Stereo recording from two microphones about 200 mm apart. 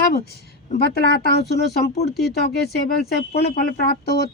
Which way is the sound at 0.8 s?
50° left (ahead or behind).